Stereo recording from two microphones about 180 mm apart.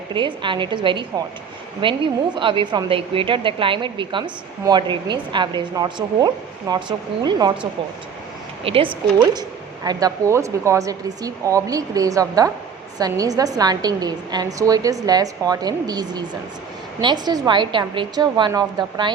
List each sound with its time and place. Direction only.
0.1 s a woman's voice: 25° right (ahead or behind)
8.6 s a woman's voice: 30° right (ahead or behind)
9.8 s a woman's voice: 20° right (ahead or behind)